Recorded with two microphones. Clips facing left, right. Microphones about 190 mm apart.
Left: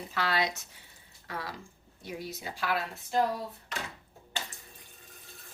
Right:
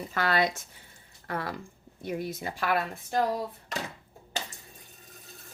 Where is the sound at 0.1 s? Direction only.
50° right (ahead or behind).